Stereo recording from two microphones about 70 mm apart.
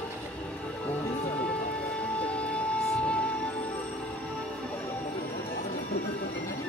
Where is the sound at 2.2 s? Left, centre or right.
Centre.